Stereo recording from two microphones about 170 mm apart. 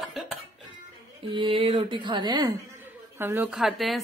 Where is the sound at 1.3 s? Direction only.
30° right (ahead or behind).